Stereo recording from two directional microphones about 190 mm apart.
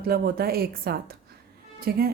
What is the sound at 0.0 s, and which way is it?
A woman's voice, 55° right (ahead or behind).